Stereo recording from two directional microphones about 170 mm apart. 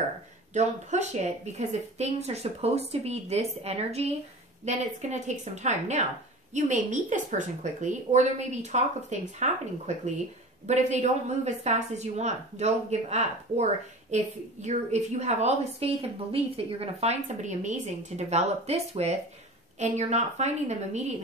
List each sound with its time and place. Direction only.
0.5 s a woman's voice: 45° right (ahead or behind)